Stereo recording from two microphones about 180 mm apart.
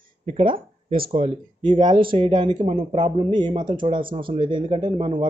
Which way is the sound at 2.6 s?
40° right (ahead or behind).